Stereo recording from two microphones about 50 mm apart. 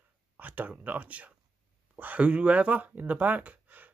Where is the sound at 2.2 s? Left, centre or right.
Right.